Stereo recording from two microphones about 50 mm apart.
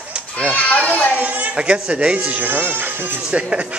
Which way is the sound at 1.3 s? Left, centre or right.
Right.